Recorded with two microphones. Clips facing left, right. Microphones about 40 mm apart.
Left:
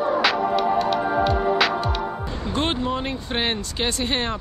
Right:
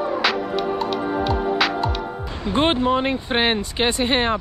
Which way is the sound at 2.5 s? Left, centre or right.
Right.